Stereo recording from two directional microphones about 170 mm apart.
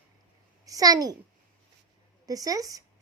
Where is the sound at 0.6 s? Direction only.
20° right (ahead or behind).